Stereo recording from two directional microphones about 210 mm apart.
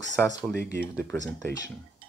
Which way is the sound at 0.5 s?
10° left (ahead or behind).